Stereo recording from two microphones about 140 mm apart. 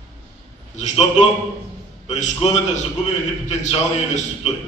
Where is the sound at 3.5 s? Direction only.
55° left (ahead or behind).